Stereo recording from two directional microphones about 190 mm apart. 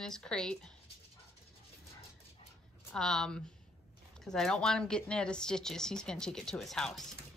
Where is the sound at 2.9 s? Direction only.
5° left (ahead or behind).